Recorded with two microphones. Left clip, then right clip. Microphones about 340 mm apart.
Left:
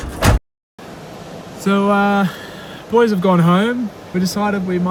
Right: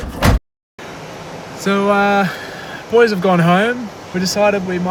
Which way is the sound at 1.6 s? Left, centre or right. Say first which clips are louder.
Right 1 dB; centre.